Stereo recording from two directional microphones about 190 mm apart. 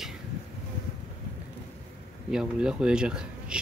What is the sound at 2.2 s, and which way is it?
Speech, 5° right (ahead or behind).